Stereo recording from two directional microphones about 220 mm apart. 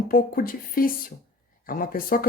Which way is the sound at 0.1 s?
40° left (ahead or behind).